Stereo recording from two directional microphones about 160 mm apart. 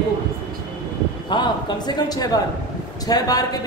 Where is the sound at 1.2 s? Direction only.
30° left (ahead or behind).